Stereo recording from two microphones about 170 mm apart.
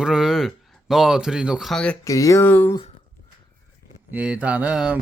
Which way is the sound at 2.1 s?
20° left (ahead or behind).